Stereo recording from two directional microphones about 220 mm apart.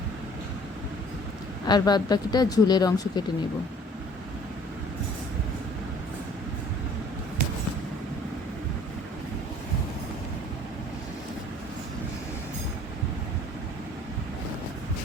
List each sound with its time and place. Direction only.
1.6 s speech: 20° left (ahead or behind)